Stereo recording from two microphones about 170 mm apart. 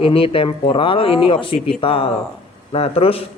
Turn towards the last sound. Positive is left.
turn(degrees=35)  # may be behind; listen again after turning